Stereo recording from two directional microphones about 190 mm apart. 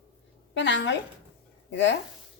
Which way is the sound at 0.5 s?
70° left (ahead or behind).